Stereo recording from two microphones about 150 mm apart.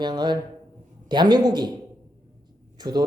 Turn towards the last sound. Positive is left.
turn(degrees=-30)  # may be behind; listen again after turning